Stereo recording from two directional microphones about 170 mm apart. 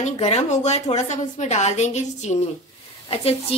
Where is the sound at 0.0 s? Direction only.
40° left (ahead or behind).